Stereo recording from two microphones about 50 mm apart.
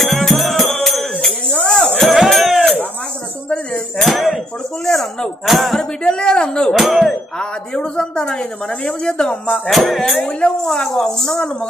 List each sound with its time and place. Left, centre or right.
0.0 s music: centre
2.2 s a sound: centre
4.0 s a sound: centre
5.5 s speech: centre
6.0 s speech: centre
6.7 s a sound: centre
7.3 s speech: centre
9.7 s speech: centre
10.2 s speech: centre